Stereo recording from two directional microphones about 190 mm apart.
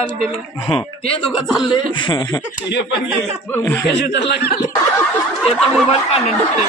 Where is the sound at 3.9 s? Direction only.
65° left (ahead or behind).